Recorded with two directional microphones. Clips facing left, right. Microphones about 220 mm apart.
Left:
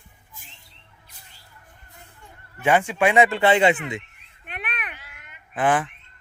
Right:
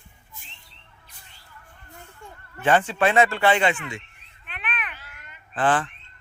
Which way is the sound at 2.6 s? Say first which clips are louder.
Left 1 dB; 10° left (ahead or behind).